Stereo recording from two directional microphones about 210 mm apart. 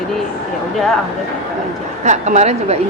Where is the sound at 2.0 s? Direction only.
35° right (ahead or behind).